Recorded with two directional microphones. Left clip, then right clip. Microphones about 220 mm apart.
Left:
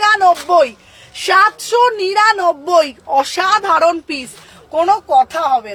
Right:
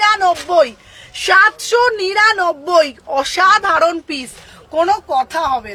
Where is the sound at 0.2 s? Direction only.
15° right (ahead or behind).